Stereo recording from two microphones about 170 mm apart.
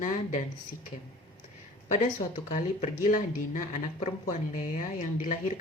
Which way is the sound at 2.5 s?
45° left (ahead or behind).